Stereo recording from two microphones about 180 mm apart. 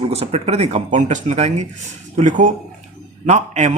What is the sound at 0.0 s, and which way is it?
Speech, 35° right (ahead or behind).